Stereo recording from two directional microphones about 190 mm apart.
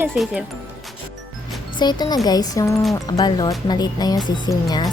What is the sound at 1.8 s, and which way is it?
Speech, 20° left (ahead or behind).